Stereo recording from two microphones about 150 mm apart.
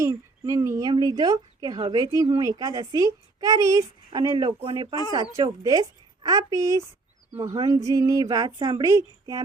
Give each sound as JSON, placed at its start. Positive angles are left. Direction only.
{"t": 0.0, "sound": "speech", "side_deg": -20}